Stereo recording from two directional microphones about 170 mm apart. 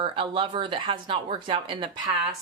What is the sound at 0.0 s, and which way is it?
Speech, 30° right (ahead or behind).